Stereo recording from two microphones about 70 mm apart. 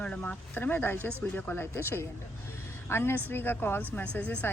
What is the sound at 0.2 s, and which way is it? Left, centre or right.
A woman's voice, left.